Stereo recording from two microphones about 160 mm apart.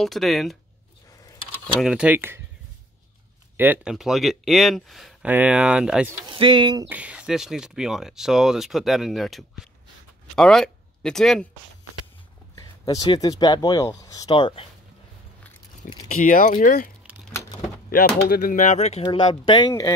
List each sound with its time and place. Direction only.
0.0 s speech: centre (ahead or behind)
1.8 s speech: 5° right (ahead or behind)
3.5 s speech: 10° right (ahead or behind)
6.2 s speech: 30° right (ahead or behind)
6.9 s speech: 10° right (ahead or behind)
12.5 s speech: 25° left (ahead or behind)
16.1 s speech: 60° left (ahead or behind)
17.0 s crumpling: 10° right (ahead or behind)
17.8 s speech: 65° left (ahead or behind); by 19.0 s 45° left (ahead or behind)
19.0 s speech: 30° left (ahead or behind)